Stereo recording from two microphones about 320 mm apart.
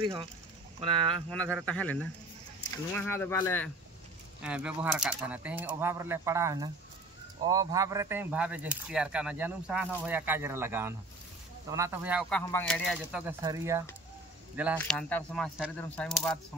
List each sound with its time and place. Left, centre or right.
0.0 s speech: centre
1.3 s speech: centre
14.8 s speech: centre